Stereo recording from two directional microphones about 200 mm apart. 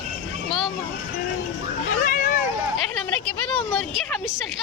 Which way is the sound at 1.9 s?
40° left (ahead or behind).